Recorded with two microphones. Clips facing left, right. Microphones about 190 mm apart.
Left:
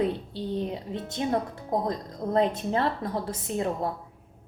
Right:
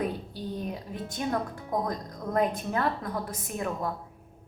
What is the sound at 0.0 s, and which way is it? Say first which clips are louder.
A woman's voice: left 4 dB; 25° left (ahead or behind).